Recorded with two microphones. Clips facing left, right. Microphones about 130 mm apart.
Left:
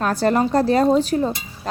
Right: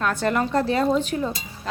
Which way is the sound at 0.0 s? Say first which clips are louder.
Left 4 dB; 35° left (ahead or behind).